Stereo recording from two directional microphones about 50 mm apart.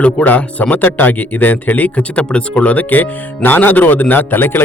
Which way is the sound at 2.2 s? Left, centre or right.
Centre.